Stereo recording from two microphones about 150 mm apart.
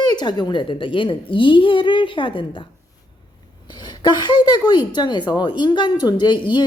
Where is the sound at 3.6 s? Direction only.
30° left (ahead or behind).